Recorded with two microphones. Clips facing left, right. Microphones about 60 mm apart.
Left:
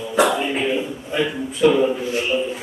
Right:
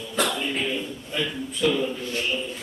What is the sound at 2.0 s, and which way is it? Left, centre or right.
Speech, centre.